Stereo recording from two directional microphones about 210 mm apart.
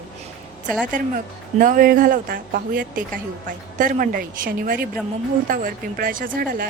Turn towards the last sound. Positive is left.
turn(degrees=-45)  # may be behind; listen again after turning